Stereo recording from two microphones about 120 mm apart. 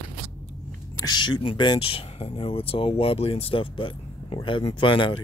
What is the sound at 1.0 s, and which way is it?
Speech, 40° left (ahead or behind).